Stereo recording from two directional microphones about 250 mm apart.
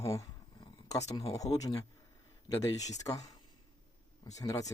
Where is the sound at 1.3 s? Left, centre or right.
Centre.